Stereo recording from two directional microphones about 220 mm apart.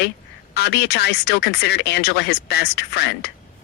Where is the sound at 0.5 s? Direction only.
50° left (ahead or behind).